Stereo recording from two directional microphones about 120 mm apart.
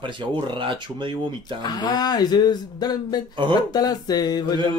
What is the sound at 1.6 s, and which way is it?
Speech, 35° left (ahead or behind).